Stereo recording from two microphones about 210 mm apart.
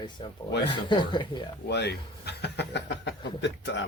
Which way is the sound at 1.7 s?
55° left (ahead or behind).